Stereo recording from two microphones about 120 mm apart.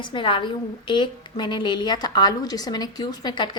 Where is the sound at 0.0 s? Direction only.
45° left (ahead or behind).